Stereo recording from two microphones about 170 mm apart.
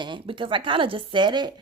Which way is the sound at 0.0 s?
30° right (ahead or behind).